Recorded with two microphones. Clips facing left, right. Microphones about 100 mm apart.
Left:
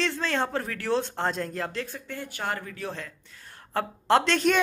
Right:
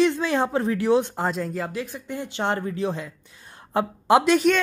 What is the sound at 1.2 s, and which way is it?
A man's voice, 5° right (ahead or behind).